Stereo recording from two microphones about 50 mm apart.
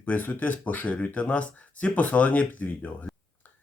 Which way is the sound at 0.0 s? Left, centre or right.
Left.